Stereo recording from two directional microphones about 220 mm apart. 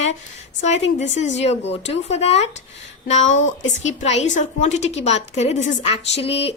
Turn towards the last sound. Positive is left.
turn(degrees=25)  # may be behind; listen again after turning